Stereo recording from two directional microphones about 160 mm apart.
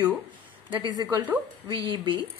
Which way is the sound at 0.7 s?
30° right (ahead or behind).